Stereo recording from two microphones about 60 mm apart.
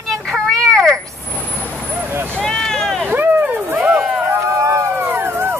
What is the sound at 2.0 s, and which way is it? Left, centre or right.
Vehicle, right.